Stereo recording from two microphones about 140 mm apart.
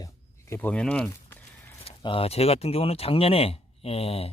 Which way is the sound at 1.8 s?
40° left (ahead or behind).